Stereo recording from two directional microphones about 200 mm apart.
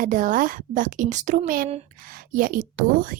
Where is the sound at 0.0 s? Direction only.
40° right (ahead or behind).